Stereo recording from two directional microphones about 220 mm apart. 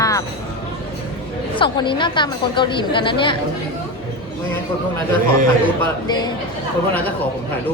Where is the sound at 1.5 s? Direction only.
20° left (ahead or behind).